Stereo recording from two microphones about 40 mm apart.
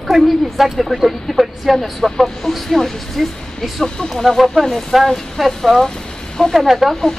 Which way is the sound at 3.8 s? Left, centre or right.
Centre.